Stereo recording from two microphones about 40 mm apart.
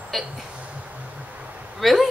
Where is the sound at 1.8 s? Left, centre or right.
Centre.